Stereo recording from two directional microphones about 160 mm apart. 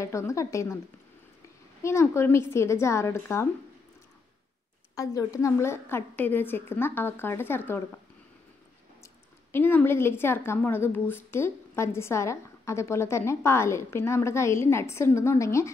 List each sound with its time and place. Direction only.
0.0 s speech: 20° left (ahead or behind)
1.8 s speech: 15° left (ahead or behind)
4.9 s speech: 20° left (ahead or behind)
9.0 s speech: 15° left (ahead or behind)